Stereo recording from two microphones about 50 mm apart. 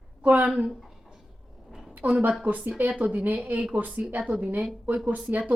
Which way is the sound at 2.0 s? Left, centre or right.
Right.